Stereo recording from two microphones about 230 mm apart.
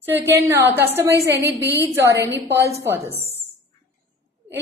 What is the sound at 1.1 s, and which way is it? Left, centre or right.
Speech, right.